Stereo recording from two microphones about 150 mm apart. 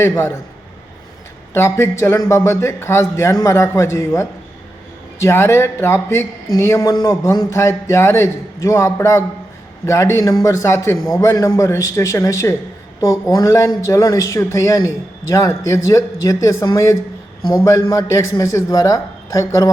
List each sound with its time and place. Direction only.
0.0 s a man's voice: 15° left (ahead or behind)
1.5 s a man's voice: 15° left (ahead or behind)